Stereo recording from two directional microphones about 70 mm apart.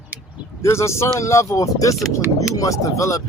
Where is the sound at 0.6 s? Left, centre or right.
Left.